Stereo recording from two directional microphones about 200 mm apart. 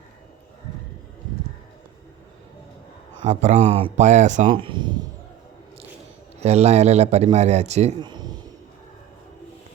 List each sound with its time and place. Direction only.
3.2 s a man's voice: 35° right (ahead or behind)
4.4 s speech: 25° right (ahead or behind)
6.4 s a man's voice: 30° right (ahead or behind)
7.9 s a sound: 20° right (ahead or behind)